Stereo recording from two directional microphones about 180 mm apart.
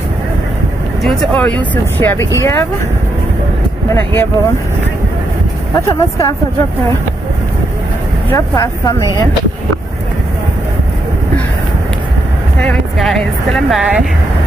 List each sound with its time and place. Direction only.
1.0 s speech: 5° left (ahead or behind)
3.9 s speech: 10° left (ahead or behind)
5.8 s speech: 15° left (ahead or behind)
8.3 s speech: 20° left (ahead or behind)
12.5 s speech: 5° left (ahead or behind)